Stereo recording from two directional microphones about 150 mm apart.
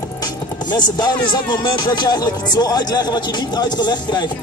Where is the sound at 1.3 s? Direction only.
30° left (ahead or behind).